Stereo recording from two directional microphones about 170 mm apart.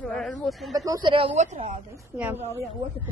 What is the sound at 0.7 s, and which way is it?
Speech, 20° right (ahead or behind).